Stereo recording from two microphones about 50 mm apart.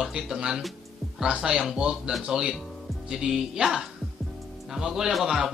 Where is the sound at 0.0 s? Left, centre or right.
Centre.